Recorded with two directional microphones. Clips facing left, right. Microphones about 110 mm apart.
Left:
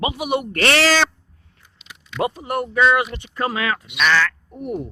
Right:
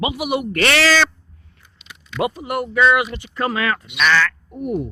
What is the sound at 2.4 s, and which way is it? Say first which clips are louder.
Speech: right 1 dB; 30° left (ahead or behind).